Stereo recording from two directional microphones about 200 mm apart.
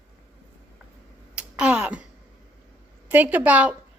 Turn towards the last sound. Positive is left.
turn(degrees=-5)  # may be behind; listen again after turning